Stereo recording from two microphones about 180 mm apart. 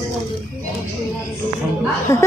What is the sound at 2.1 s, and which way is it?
Speech, 15° left (ahead or behind).